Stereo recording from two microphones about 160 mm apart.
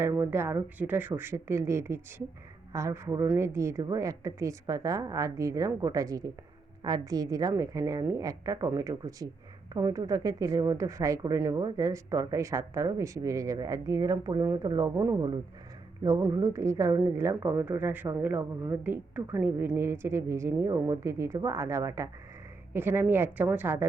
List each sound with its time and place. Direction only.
0.0 s a woman's voice: 15° right (ahead or behind)